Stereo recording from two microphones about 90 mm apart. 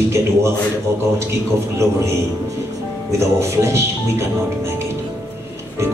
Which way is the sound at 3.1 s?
30° right (ahead or behind).